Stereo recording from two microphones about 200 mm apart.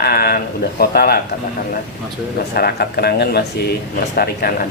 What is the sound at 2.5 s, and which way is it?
Speech, 50° left (ahead or behind).